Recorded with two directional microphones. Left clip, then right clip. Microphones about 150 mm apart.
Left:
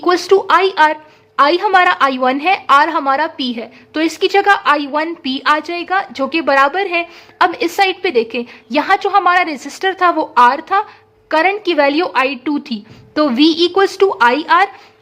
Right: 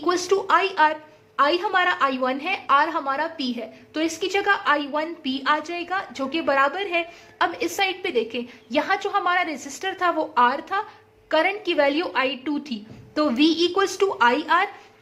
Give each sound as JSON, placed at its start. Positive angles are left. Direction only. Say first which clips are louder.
{"t": 0.0, "sound": "a woman's voice", "louder": "left 10 dB", "side_deg": 40}